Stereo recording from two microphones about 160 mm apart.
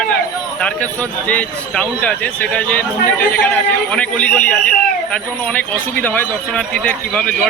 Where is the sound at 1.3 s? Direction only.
10° left (ahead or behind).